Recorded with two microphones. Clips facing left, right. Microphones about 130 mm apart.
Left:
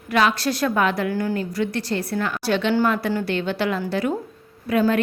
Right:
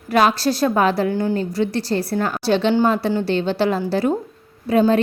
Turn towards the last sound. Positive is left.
turn(degrees=-30)  # may be behind; listen again after turning